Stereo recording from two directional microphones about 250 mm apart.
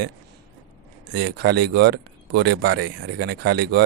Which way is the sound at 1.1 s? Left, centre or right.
Right.